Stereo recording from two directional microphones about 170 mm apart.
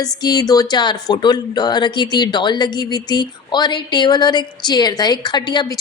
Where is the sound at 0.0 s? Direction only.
25° left (ahead or behind).